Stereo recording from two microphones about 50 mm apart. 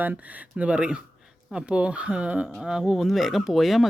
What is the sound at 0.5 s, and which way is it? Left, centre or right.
Speech, right.